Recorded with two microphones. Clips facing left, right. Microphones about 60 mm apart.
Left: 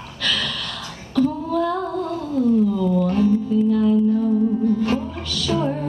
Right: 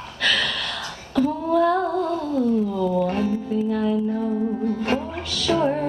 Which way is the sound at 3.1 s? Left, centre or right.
Right.